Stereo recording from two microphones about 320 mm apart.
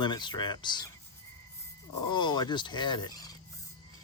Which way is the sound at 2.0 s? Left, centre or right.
Centre.